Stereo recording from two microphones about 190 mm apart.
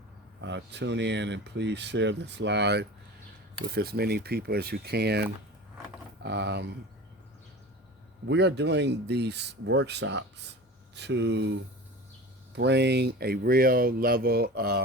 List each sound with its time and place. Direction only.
0.4 s speech: 65° right (ahead or behind)
8.3 s speech: 65° right (ahead or behind)
12.5 s speech: 65° right (ahead or behind)